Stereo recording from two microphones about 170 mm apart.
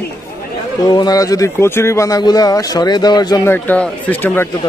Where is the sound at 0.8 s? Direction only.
25° left (ahead or behind).